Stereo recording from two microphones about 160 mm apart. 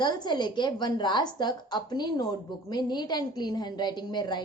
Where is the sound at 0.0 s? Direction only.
30° left (ahead or behind).